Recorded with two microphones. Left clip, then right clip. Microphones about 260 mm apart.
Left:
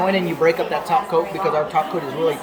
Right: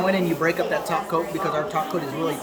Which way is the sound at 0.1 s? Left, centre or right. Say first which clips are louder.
Left 4 dB; centre.